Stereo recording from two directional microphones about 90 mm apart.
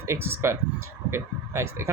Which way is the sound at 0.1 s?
30° right (ahead or behind).